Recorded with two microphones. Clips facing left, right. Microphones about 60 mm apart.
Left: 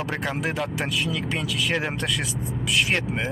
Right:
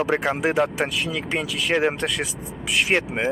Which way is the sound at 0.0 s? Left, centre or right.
Centre.